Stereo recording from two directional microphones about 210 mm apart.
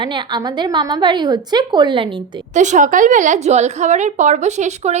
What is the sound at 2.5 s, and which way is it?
A woman's voice, 35° right (ahead or behind).